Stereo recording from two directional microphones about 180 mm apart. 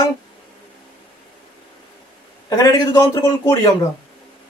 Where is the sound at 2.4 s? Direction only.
20° left (ahead or behind).